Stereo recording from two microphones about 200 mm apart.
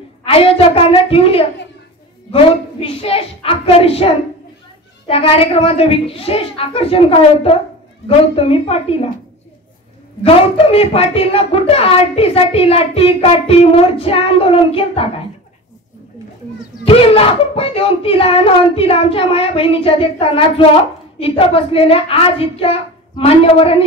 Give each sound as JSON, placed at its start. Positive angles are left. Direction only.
{"t": 0.2, "sound": "a woman's voice", "side_deg": 30}
{"t": 10.2, "sound": "a woman's voice", "side_deg": 30}
{"t": 16.8, "sound": "a woman's voice", "side_deg": 25}